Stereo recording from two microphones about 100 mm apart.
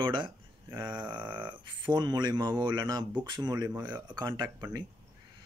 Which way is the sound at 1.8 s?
45° right (ahead or behind).